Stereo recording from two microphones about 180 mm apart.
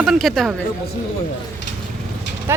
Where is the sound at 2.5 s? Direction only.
15° right (ahead or behind).